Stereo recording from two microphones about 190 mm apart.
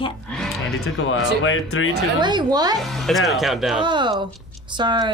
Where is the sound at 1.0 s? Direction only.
90° left.